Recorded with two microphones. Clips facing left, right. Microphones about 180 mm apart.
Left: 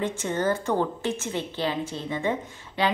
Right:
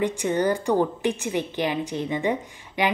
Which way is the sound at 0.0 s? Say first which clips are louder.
Right 3 dB; 15° right (ahead or behind).